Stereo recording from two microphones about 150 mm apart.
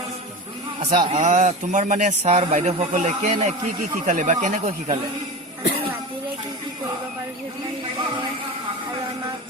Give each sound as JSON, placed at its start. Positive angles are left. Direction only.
{"t": 0.9, "sound": "speech", "side_deg": -55}